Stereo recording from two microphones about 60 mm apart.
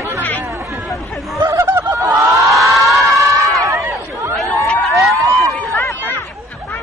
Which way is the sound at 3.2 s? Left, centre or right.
Right.